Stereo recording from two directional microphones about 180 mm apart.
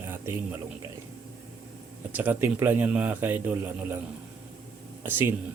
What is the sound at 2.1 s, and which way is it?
Speech, 10° right (ahead or behind).